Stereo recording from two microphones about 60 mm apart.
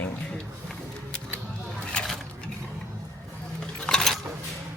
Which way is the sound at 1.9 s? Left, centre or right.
Centre.